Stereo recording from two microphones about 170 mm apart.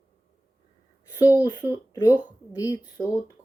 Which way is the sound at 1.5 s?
25° left (ahead or behind).